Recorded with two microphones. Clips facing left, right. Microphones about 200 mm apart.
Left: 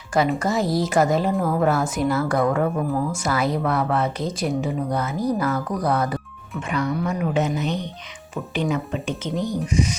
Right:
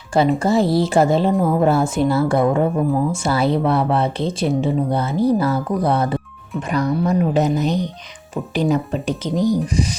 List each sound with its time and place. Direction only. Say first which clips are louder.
0.3 s a woman's voice: right 5 dB; 30° right (ahead or behind)
6.7 s speech: right 5 dB; 40° right (ahead or behind)